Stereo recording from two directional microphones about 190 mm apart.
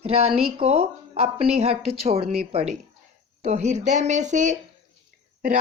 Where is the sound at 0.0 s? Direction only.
30° right (ahead or behind).